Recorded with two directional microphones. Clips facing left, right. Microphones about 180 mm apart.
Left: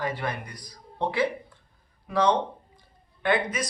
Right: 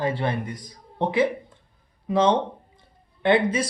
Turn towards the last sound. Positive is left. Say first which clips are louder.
# right 6 dB
turn(degrees=-25)  # may be behind; listen again after turning